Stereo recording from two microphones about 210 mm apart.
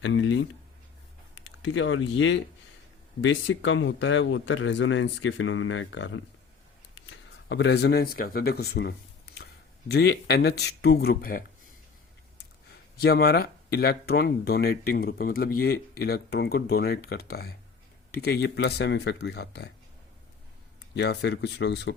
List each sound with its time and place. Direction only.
0.0 s speech: 65° left (ahead or behind); by 11.4 s 45° left (ahead or behind)
13.0 s speech: 50° left (ahead or behind)
20.9 s speech: 55° left (ahead or behind)